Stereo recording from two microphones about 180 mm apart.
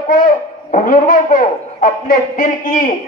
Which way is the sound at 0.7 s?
45° left (ahead or behind).